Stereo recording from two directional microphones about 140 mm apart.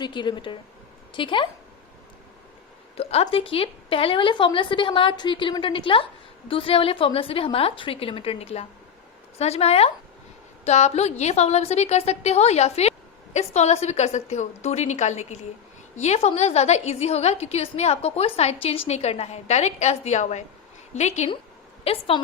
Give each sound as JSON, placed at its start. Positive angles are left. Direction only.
{"t": 0.0, "sound": "a woman's voice", "side_deg": 35}
{"t": 3.0, "sound": "a woman's voice", "side_deg": 45}
{"t": 21.8, "sound": "a woman's voice", "side_deg": 40}